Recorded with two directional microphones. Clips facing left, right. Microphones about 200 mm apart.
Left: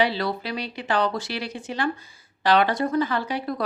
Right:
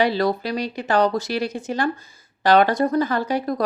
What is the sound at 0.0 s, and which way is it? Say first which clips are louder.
Speech: right 4 dB; 45° right (ahead or behind).